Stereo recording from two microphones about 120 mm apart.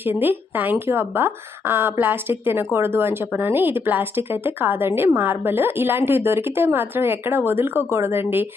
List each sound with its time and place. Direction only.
0.0 s speech: 15° right (ahead or behind)